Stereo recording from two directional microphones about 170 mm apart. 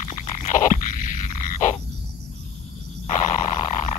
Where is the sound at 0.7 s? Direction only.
50° left (ahead or behind).